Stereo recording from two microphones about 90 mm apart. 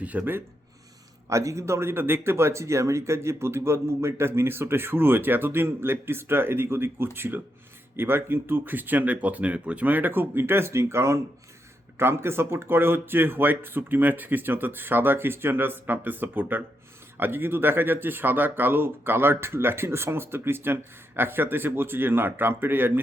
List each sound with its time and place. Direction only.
0.0 s speech: 15° right (ahead or behind)
1.3 s speech: 35° right (ahead or behind)